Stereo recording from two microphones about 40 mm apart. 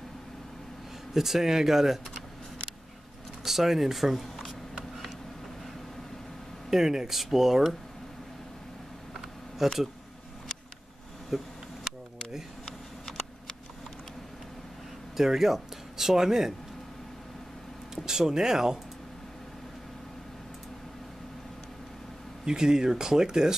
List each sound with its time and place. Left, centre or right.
1.1 s speech: centre
3.4 s a sound: centre
6.7 s speech: centre
9.6 s speech: centre
11.2 s a sound: centre
12.6 s a sound: centre
15.1 s speech: centre
17.9 s speech: centre
22.4 s speech: centre